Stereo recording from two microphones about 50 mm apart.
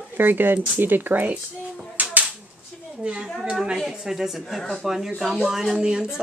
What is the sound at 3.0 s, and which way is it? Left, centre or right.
A woman's voice, right.